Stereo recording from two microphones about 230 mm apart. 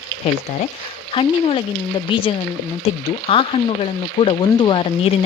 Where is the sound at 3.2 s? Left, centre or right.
Left.